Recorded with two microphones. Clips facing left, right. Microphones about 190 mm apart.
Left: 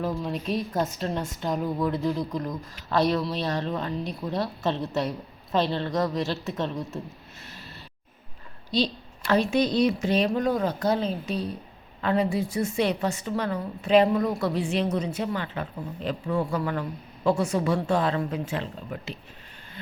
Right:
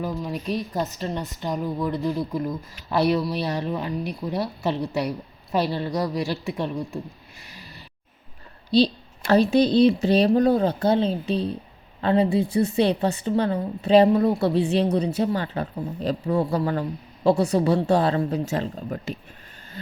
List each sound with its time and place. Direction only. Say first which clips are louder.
0.0 s speech: even; centre (ahead or behind)
4.2 s speech: even; centre (ahead or behind)
6.2 s speech: right 2 dB; 15° right (ahead or behind)
8.7 s a woman's voice: right 7 dB; 35° right (ahead or behind)